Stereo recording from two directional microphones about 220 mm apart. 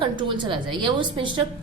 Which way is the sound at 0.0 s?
20° right (ahead or behind).